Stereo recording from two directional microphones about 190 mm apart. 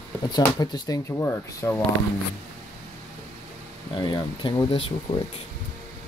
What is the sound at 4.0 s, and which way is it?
Speech, 25° left (ahead or behind).